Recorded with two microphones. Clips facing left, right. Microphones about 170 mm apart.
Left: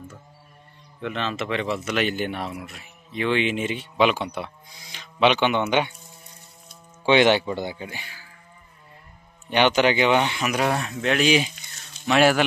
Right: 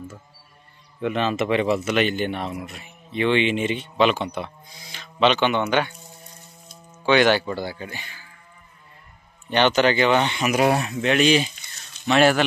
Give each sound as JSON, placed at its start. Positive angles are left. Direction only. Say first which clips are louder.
{"t": 1.0, "sound": "speech", "louder": "right 5 dB", "side_deg": -10}
{"t": 2.0, "sound": "speech", "louder": "right 3 dB", "side_deg": 5}
{"t": 7.1, "sound": "speech", "louder": "even", "side_deg": 25}
{"t": 9.5, "sound": "speech", "louder": "right 1 dB", "side_deg": 10}
{"t": 10.5, "sound": "speech", "louder": "right 8 dB", "side_deg": -10}